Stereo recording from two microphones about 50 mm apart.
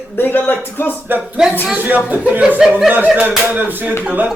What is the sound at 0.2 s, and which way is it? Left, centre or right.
Speech, left.